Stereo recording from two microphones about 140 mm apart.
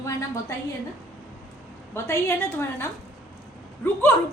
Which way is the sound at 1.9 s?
15° left (ahead or behind).